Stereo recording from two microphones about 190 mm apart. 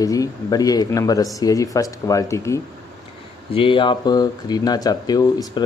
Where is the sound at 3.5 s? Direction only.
25° left (ahead or behind).